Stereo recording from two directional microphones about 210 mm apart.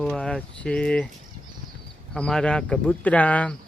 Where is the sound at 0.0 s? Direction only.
5° left (ahead or behind).